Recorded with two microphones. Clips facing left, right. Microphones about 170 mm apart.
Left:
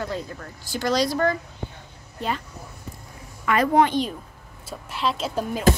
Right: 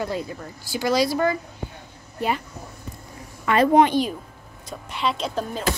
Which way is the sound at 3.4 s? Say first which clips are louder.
Right 3 dB; 25° right (ahead or behind).